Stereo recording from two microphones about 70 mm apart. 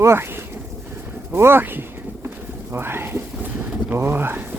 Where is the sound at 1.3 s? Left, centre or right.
Right.